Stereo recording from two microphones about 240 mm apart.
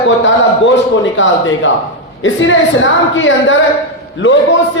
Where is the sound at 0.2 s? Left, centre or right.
Left.